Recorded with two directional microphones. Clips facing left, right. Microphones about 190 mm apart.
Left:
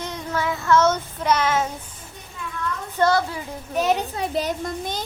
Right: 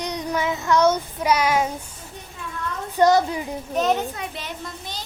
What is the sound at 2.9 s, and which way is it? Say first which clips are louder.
Speech: right 3 dB; 15° right (ahead or behind).